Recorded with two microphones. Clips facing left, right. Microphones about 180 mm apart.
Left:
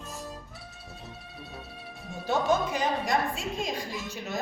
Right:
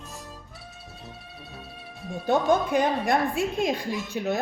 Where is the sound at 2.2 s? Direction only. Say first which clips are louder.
Right 4 dB; 55° right (ahead or behind).